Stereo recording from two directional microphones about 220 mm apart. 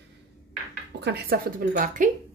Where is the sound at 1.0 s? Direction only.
45° right (ahead or behind).